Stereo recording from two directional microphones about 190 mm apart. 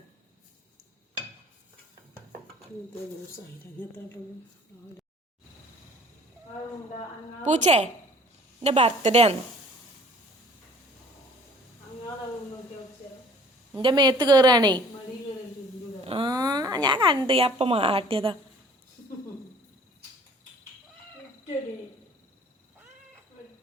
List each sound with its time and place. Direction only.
7.4 s a woman's voice: 40° right (ahead or behind)
13.7 s speech: 25° right (ahead or behind)
16.0 s speech: 25° right (ahead or behind)